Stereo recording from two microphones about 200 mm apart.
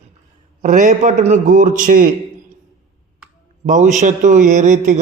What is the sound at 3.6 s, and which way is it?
A man's voice, 40° right (ahead or behind).